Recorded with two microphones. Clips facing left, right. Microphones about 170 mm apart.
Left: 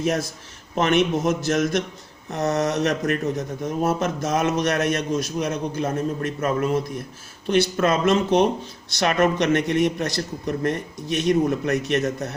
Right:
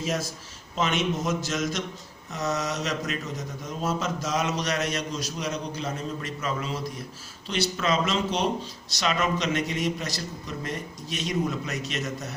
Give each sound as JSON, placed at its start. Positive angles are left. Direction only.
{"t": 0.0, "sound": "speech", "side_deg": 55}